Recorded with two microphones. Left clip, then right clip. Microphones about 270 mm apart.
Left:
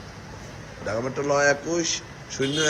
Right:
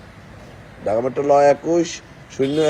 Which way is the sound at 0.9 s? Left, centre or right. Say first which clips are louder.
Right 8 dB; centre.